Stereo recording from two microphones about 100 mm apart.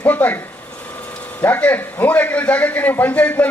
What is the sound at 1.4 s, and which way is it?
A man's voice, 20° left (ahead or behind).